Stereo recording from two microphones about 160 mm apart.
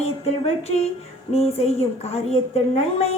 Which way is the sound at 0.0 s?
40° left (ahead or behind).